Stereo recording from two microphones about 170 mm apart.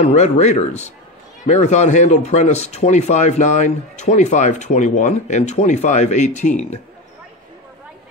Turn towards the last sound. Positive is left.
turn(degrees=45)  # may be behind; listen again after turning